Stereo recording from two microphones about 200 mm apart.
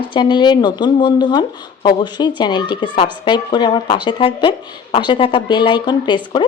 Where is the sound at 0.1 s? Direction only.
25° left (ahead or behind).